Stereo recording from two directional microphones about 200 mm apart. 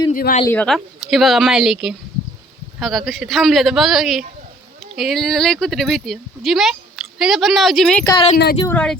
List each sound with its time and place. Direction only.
0.1 s speech: 45° left (ahead or behind)
0.4 s speech: 5° left (ahead or behind)
8.0 s speech: 20° left (ahead or behind)
8.6 s speech: 5° left (ahead or behind)